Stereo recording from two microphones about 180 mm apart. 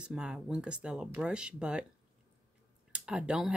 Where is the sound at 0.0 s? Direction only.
5° right (ahead or behind).